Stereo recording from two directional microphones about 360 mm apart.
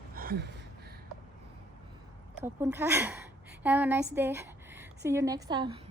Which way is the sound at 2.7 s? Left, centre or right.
Centre.